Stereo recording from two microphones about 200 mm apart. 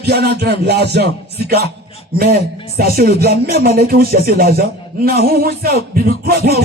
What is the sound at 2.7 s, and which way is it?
Speech, 50° right (ahead or behind).